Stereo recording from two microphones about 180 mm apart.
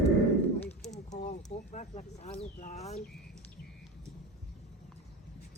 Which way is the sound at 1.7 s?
40° left (ahead or behind).